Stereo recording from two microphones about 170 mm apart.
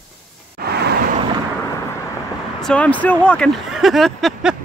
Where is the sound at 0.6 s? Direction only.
70° right (ahead or behind).